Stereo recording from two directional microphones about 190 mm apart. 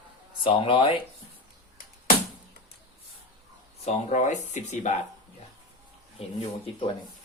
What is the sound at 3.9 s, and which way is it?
Speech, 40° left (ahead or behind).